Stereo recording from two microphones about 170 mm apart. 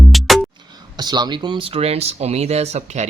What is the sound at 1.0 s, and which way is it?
Speech, 25° right (ahead or behind).